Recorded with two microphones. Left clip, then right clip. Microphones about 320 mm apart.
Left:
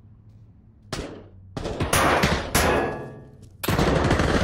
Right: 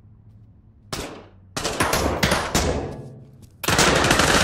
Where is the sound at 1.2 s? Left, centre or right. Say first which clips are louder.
Right 5 dB; right.